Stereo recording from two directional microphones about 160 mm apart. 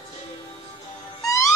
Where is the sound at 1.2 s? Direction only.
20° left (ahead or behind).